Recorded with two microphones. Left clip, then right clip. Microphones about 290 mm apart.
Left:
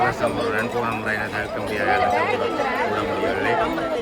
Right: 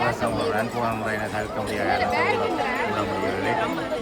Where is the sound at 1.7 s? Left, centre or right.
Centre.